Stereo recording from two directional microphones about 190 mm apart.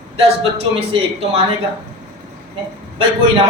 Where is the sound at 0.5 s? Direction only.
30° right (ahead or behind).